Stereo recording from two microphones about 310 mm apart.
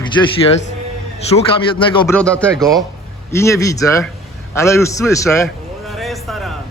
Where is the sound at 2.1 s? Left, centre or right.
Centre.